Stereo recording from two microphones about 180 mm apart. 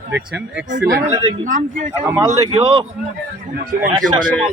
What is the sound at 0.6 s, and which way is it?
Speech, 45° right (ahead or behind).